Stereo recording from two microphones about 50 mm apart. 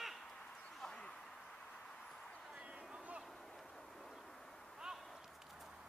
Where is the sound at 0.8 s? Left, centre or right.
Centre.